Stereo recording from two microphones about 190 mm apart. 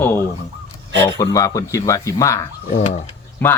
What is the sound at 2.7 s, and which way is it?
Carnatic music, 35° left (ahead or behind).